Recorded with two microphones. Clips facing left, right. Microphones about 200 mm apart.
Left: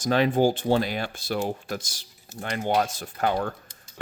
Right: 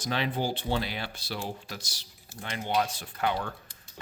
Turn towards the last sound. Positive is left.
turn(degrees=45)  # may be behind; listen again after turning